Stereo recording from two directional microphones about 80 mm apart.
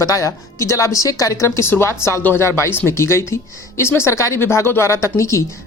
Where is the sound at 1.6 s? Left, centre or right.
Left.